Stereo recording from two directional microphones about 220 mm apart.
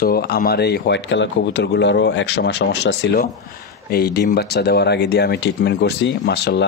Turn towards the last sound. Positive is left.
turn(degrees=50)  # may be behind; listen again after turning